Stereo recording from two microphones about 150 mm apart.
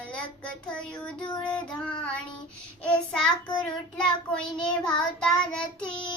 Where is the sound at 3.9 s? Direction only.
5° left (ahead or behind).